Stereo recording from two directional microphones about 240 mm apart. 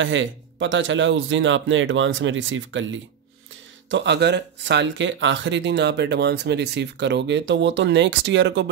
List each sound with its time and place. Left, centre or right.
0.0 s speech: right